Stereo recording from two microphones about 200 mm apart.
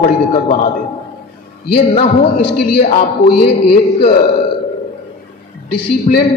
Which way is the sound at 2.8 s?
30° left (ahead or behind).